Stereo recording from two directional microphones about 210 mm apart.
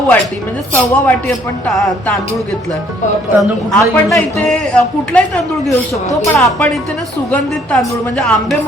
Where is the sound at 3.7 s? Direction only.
Centre (ahead or behind).